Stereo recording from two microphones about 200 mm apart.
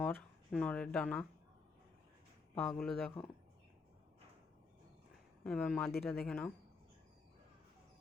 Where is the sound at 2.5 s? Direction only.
5° left (ahead or behind).